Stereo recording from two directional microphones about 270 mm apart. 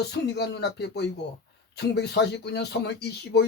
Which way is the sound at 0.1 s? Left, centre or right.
Left.